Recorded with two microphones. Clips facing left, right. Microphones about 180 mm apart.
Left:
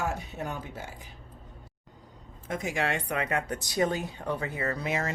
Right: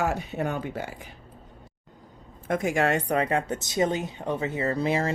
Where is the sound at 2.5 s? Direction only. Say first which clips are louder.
Right 6 dB; 55° right (ahead or behind).